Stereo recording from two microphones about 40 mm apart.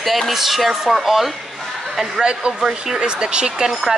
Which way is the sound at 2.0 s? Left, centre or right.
Centre.